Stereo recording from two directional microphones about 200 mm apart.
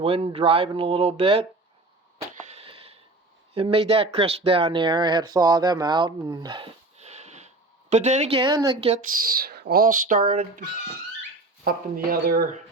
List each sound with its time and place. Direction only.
0.0 s speech: 30° right (ahead or behind)
2.3 s a sound: 35° right (ahead or behind)
3.5 s speech: 30° right (ahead or behind)
9.3 s speech: 50° right (ahead or behind)